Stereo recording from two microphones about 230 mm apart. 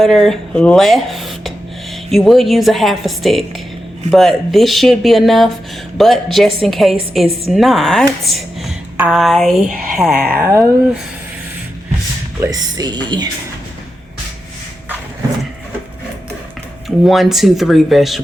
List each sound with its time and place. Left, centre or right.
0.0 s a woman's voice: centre
12.4 s a woman's voice: centre
17.0 s a woman's voice: centre